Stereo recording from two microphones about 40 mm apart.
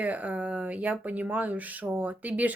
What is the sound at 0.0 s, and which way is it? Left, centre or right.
Speech, right.